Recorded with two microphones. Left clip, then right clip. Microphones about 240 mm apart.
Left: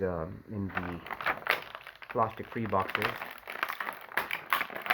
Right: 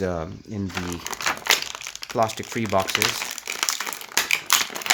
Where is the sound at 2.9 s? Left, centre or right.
Centre.